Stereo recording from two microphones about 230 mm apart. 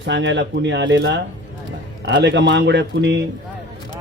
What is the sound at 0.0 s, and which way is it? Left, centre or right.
A man's voice, right.